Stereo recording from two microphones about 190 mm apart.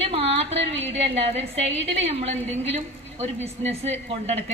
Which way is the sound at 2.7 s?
35° right (ahead or behind).